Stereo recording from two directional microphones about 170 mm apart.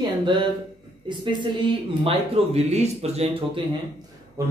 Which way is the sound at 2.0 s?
35° right (ahead or behind).